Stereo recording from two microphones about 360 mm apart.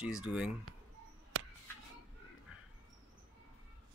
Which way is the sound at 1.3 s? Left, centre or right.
Right.